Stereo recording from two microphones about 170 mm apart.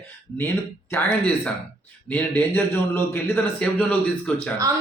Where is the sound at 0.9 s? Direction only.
5° left (ahead or behind).